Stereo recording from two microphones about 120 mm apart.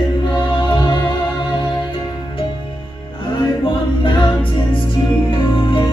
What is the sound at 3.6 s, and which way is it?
A capella, 45° left (ahead or behind).